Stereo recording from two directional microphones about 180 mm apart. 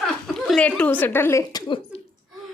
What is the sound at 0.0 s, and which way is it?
A woman's voice, centre (ahead or behind).